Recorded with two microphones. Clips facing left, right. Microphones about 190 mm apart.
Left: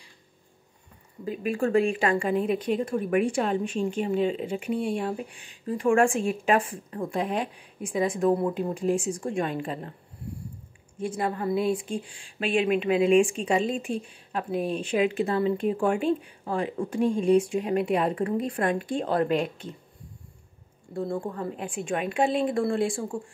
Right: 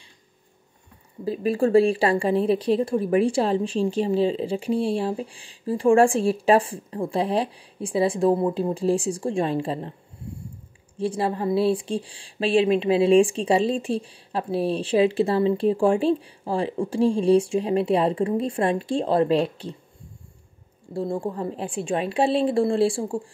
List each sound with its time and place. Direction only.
1.2 s speech: 35° right (ahead or behind)
11.0 s speech: 30° right (ahead or behind)
20.9 s speech: 30° right (ahead or behind)